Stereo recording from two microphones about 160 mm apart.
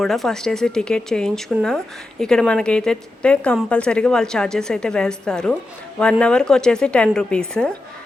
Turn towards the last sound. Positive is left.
turn(degrees=5)  # may be behind; listen again after turning